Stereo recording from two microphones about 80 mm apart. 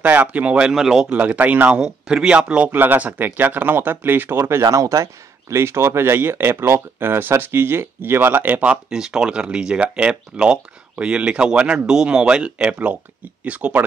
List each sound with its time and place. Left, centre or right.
0.0 s speech: centre
1.1 s speech: centre
8.9 s speech: centre